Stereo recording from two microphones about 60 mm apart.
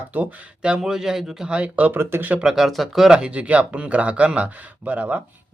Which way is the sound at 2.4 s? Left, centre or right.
Centre.